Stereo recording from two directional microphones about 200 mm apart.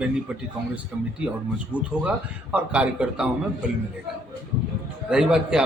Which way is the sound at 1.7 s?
5° right (ahead or behind).